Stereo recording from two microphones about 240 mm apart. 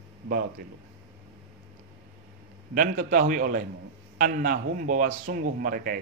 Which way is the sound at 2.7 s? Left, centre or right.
Right.